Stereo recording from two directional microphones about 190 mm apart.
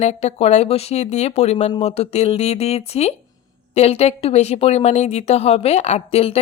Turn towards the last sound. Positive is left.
turn(degrees=35)  # may be behind; listen again after turning